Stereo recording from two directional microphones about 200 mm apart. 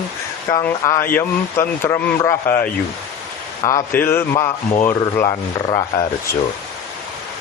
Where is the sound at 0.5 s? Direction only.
15° left (ahead or behind).